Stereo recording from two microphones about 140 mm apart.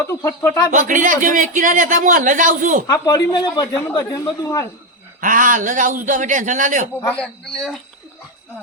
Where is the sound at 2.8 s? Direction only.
25° left (ahead or behind).